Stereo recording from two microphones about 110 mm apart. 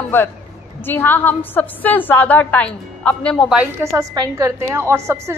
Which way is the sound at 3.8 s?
20° right (ahead or behind).